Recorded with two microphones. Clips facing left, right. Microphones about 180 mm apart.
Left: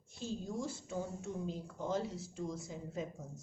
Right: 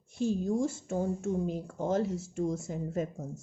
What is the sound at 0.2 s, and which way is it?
A woman's voice, 55° right (ahead or behind).